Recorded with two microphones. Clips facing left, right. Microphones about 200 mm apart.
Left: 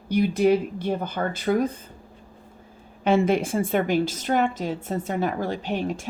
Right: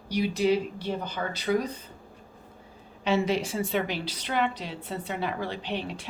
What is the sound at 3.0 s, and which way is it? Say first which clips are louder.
A woman's voice: left 5 dB; 50° left (ahead or behind).